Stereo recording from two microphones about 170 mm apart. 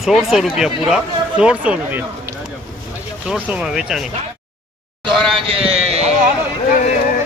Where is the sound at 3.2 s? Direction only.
5° right (ahead or behind).